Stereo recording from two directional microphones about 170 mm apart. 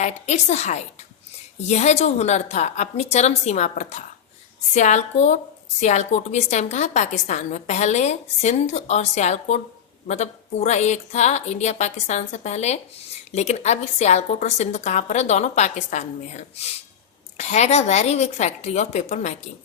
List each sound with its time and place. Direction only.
0.0 s a woman's voice: 40° left (ahead or behind)